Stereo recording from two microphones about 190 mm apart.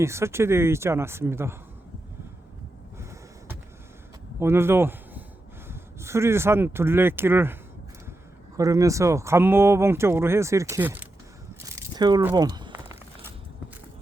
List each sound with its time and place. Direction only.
0.0 s speech: 15° right (ahead or behind)
4.4 s speech: 15° right (ahead or behind)
11.7 s a sound: 20° right (ahead or behind)